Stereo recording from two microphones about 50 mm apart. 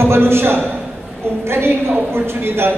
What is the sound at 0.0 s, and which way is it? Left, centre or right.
A man's voice, right.